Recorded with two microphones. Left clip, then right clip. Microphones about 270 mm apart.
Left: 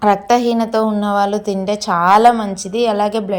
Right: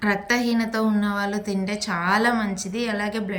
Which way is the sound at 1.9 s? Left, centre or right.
Left.